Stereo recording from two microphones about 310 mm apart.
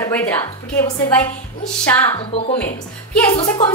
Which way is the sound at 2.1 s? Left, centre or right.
Centre.